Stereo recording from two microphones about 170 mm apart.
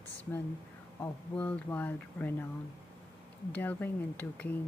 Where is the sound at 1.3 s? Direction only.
10° left (ahead or behind).